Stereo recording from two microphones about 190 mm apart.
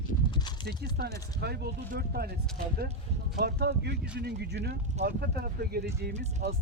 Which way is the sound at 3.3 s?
55° right (ahead or behind).